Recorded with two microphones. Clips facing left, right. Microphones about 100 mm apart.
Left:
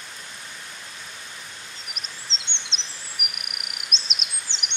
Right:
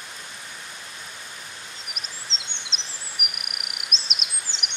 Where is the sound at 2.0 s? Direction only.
Centre (ahead or behind).